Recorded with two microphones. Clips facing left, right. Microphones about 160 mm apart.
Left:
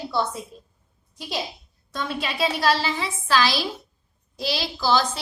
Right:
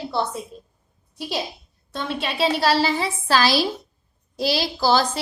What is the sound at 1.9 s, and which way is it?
A woman's voice, 30° right (ahead or behind).